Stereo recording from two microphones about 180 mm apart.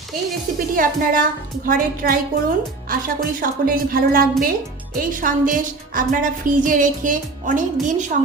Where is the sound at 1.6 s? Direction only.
50° right (ahead or behind).